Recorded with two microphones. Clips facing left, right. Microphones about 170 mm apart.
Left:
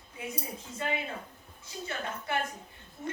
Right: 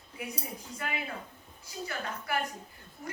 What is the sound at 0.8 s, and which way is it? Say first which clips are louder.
A woman's voice: left 4 dB; 25° left (ahead or behind).